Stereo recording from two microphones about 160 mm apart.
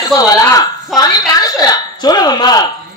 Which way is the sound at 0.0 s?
20° left (ahead or behind).